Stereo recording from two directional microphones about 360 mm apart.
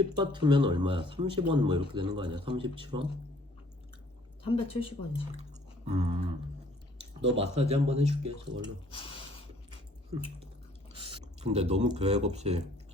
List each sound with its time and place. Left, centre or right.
0.2 s speech: centre
4.4 s speech: centre
5.4 s a sound: centre
7.3 s speech: centre
8.9 s speech: centre
10.9 s speech: centre